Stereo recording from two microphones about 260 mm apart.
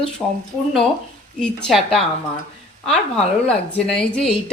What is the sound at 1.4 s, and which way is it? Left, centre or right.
A woman's voice, centre.